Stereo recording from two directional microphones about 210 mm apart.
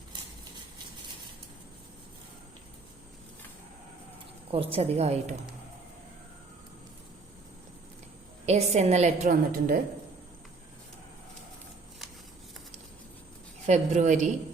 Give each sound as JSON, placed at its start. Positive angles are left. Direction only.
{"t": 4.5, "sound": "a woman's voice", "side_deg": -25}
{"t": 8.4, "sound": "a woman's voice", "side_deg": -30}
{"t": 13.7, "sound": "a woman's voice", "side_deg": -35}